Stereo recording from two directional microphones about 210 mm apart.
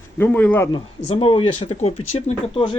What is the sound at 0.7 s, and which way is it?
Speech, 25° left (ahead or behind).